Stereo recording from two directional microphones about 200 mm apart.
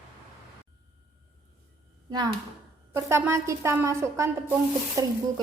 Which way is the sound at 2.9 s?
15° right (ahead or behind).